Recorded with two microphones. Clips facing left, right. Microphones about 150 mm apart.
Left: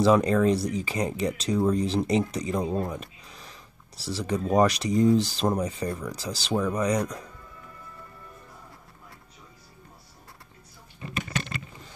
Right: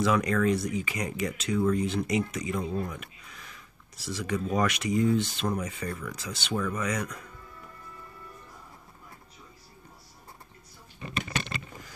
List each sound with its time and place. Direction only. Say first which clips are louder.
0.0 s speech: left 5 dB; 30° left (ahead or behind)